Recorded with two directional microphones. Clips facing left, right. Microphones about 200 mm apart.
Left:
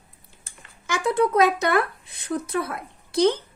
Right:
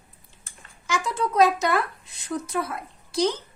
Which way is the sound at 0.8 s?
60° left (ahead or behind).